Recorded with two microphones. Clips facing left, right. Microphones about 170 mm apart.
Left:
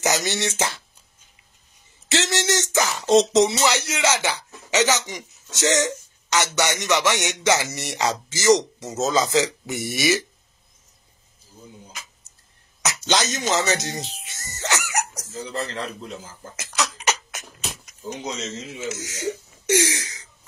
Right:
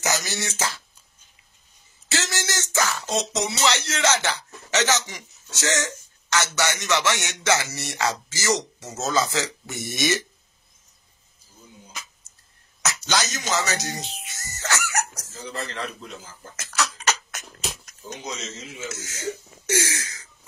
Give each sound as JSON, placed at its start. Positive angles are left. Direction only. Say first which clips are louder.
{"t": 0.0, "sound": "speech", "louder": "left 4 dB", "side_deg": 25}
{"t": 2.0, "sound": "speech", "louder": "left 6 dB", "side_deg": 25}
{"t": 3.2, "sound": "speech", "louder": "left 12 dB", "side_deg": 25}
{"t": 3.6, "sound": "speech", "louder": "left 1 dB", "side_deg": 15}
{"t": 12.8, "sound": "speech", "louder": "left 3 dB", "side_deg": 25}
{"t": 15.5, "sound": "a man's voice", "louder": "left 2 dB", "side_deg": 35}
{"t": 16.5, "sound": "a sound", "louder": "left 1 dB", "side_deg": 15}
{"t": 18.9, "sound": "speech", "louder": "left 3 dB", "side_deg": 15}